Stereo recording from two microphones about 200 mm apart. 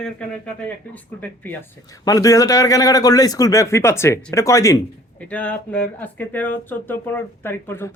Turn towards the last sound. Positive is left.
turn(degrees=10)  # may be behind; listen again after turning